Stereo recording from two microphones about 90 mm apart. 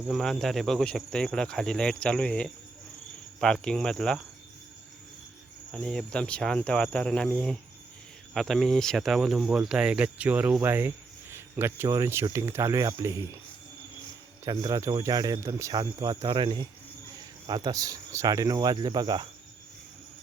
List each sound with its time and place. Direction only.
0.1 s speech: centre (ahead or behind)
5.7 s speech: 5° left (ahead or behind); by 13.2 s 35° right (ahead or behind)
14.5 s speech: 45° right (ahead or behind)
15.7 s speech: 45° right (ahead or behind)
16.2 s speech: 60° right (ahead or behind)
17.4 s speech: 50° right (ahead or behind)